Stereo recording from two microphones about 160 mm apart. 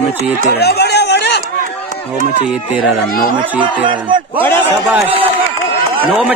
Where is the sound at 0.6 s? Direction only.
90° left.